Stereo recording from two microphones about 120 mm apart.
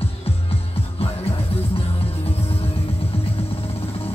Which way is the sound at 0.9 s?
55° left (ahead or behind).